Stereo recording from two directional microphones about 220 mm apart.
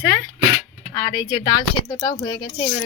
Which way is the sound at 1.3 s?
20° left (ahead or behind).